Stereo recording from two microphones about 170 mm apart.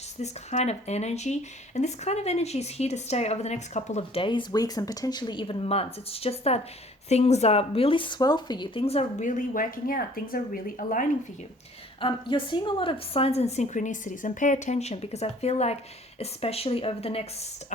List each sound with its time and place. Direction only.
0.2 s speech: 40° left (ahead or behind)
11.9 s speech: 30° left (ahead or behind)